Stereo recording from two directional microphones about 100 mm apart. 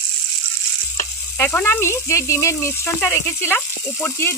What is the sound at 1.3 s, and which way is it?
Speech, 20° left (ahead or behind).